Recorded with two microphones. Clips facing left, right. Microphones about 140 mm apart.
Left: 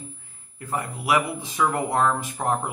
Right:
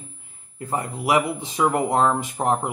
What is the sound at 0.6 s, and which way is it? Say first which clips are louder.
Speech: right 3 dB; 30° right (ahead or behind).